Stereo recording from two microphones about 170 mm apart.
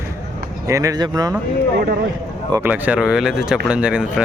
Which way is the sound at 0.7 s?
20° right (ahead or behind).